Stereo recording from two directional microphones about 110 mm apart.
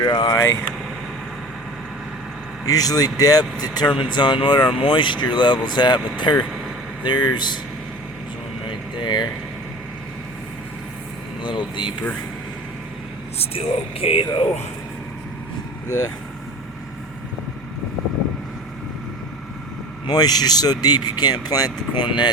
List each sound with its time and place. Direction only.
0.0 s speech: 40° left (ahead or behind)
2.6 s speech: 35° left (ahead or behind)
9.0 s speech: 45° left (ahead or behind)
11.4 s speech: 45° left (ahead or behind)
13.4 s speech: 65° left (ahead or behind)
15.9 s speech: 30° left (ahead or behind)
20.1 s speech: 35° left (ahead or behind)